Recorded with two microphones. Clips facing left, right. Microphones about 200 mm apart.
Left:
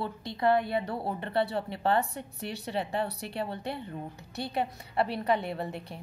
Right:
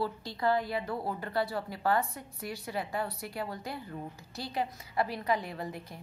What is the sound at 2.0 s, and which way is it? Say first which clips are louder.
Speech: left 3 dB; 70° left (ahead or behind).